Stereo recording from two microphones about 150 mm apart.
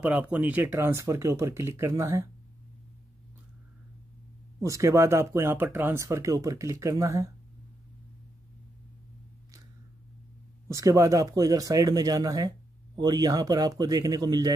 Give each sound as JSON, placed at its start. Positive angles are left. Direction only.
{"t": 0.0, "sound": "speech", "side_deg": -10}
{"t": 4.6, "sound": "speech", "side_deg": -20}
{"t": 10.7, "sound": "speech", "side_deg": -20}